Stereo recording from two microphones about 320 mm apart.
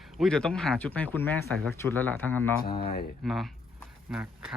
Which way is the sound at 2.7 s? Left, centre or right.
Centre.